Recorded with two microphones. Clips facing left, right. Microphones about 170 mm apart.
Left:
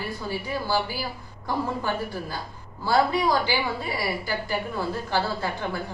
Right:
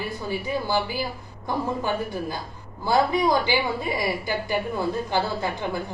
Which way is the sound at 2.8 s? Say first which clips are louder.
Right 1 dB; 15° right (ahead or behind).